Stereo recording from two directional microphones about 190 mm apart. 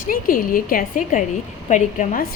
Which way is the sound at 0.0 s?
45° left (ahead or behind).